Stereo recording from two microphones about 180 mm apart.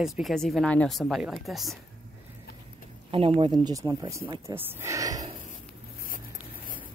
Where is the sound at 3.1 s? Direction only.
30° right (ahead or behind).